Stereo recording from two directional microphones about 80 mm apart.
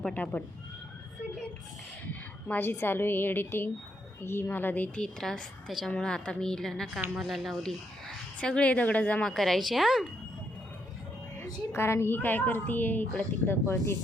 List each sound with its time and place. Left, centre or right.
0.1 s a child's voice: left
2.5 s a child's voice: left
4.9 s a woman's voice: centre
9.2 s speech: centre
11.7 s a child's voice: left